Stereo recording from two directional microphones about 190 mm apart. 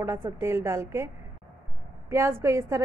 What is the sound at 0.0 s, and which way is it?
A woman's voice, 15° right (ahead or behind).